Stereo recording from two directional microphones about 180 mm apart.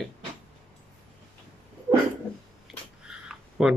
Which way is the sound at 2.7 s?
5° right (ahead or behind).